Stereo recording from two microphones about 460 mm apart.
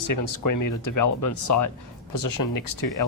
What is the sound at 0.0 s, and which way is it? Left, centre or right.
Speech, left.